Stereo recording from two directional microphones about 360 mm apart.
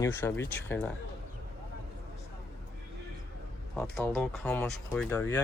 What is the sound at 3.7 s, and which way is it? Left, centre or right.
Speech, centre.